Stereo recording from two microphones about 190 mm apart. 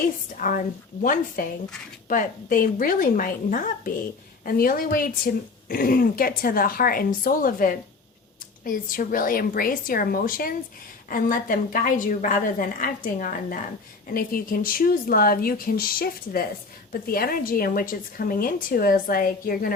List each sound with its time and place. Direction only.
0.0 s speech: 45° left (ahead or behind)